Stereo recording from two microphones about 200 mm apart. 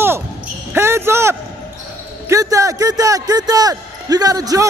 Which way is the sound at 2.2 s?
15° right (ahead or behind).